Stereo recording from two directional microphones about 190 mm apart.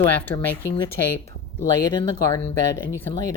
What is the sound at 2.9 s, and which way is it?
Speech, 10° left (ahead or behind).